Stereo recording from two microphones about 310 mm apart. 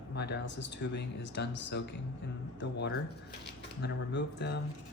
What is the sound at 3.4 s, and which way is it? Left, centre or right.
Speech, left.